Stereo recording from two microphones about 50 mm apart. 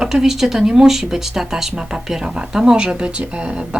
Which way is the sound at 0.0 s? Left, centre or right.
Centre.